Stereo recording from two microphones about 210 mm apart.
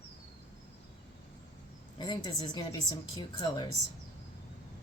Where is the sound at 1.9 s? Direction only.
20° left (ahead or behind).